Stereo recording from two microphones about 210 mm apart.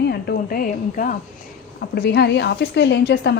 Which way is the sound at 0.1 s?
45° left (ahead or behind).